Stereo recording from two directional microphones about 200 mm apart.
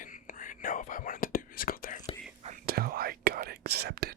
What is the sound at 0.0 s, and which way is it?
Whispering, 40° left (ahead or behind).